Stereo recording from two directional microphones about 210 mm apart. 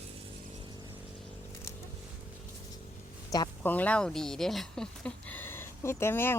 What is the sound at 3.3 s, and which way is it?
Speech, 15° left (ahead or behind).